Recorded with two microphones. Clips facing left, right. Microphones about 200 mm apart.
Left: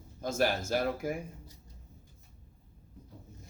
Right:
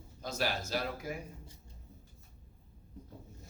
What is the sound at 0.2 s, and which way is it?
Speech, 50° left (ahead or behind).